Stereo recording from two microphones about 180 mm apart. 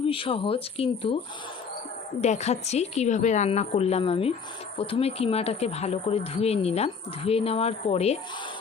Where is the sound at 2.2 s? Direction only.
40° left (ahead or behind).